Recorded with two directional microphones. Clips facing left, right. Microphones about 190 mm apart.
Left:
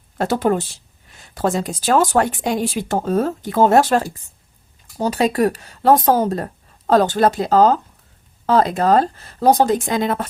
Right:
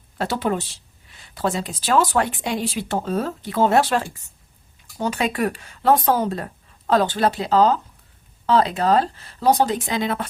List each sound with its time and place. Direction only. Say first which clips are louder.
0.2 s speech: left 5 dB; 45° left (ahead or behind)